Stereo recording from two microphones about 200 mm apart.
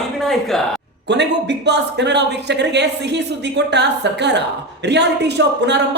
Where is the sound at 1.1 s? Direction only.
60° right (ahead or behind).